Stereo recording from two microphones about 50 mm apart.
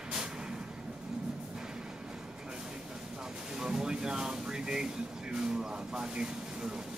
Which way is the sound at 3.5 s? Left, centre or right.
Centre.